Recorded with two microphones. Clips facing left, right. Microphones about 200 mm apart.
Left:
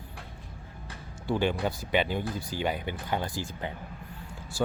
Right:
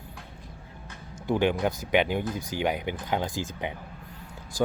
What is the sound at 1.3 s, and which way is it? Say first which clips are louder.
Speech: right 3 dB; 15° right (ahead or behind).